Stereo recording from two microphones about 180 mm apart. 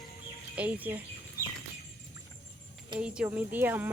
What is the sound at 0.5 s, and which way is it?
Speech, 10° right (ahead or behind).